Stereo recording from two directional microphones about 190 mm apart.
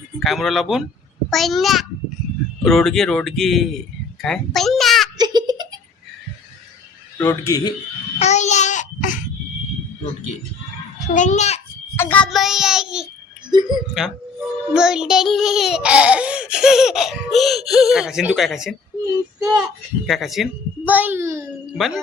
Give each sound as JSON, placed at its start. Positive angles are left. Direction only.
{"t": 0.2, "sound": "child singing", "side_deg": 0}
{"t": 2.6, "sound": "speech", "side_deg": 0}
{"t": 5.1, "sound": "giggle", "side_deg": -20}
{"t": 7.2, "sound": "a man's voice", "side_deg": 15}
{"t": 8.2, "sound": "babbling", "side_deg": 35}
{"t": 11.1, "sound": "a child's voice", "side_deg": 40}
{"t": 11.9, "sound": "child singing", "side_deg": 10}
{"t": 13.5, "sound": "speech", "side_deg": -25}
{"t": 14.7, "sound": "child singing", "side_deg": -5}
{"t": 19.4, "sound": "a child's voice", "side_deg": -5}
{"t": 21.7, "sound": "child singing", "side_deg": 0}